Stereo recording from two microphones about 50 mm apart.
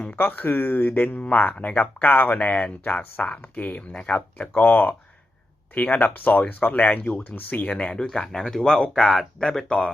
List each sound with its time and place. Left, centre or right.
0.2 s speech: left
7.9 s speech: centre
9.6 s speech: left